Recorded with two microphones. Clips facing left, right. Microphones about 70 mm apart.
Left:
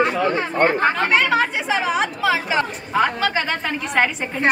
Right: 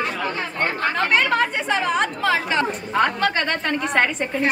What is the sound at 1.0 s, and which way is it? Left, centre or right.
Speech, centre.